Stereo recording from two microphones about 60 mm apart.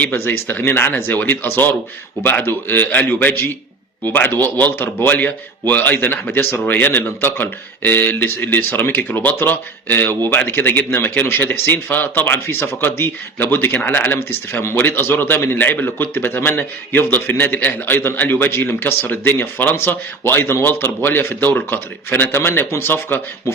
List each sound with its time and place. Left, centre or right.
0.0 s speech: left